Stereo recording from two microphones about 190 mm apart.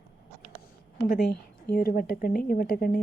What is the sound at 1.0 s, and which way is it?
A woman's voice, 55° left (ahead or behind).